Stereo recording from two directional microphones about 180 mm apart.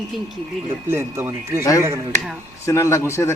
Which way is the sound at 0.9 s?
15° right (ahead or behind).